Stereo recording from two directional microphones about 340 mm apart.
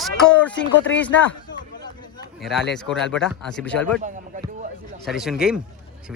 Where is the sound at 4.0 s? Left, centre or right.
Right.